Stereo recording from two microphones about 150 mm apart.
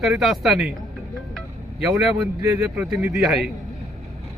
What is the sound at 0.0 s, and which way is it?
Speech, centre (ahead or behind).